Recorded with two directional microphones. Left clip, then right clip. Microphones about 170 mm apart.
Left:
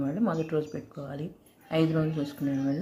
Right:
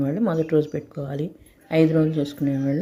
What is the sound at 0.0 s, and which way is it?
Speech, 40° right (ahead or behind).